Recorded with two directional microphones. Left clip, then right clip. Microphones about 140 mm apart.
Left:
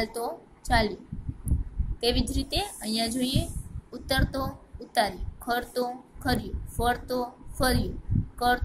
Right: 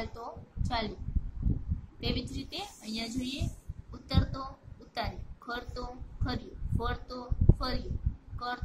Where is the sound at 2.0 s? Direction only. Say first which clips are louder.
Left 10 dB; 25° left (ahead or behind).